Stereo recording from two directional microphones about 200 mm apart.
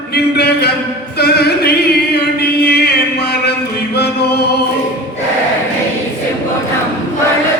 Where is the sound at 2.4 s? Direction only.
55° left (ahead or behind).